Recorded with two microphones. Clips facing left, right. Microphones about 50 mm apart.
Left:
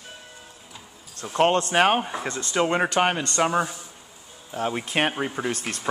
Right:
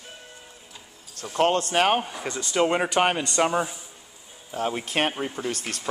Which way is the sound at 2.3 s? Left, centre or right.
Centre.